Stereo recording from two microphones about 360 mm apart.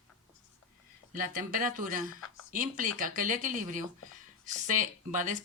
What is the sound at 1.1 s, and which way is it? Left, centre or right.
Speech, right.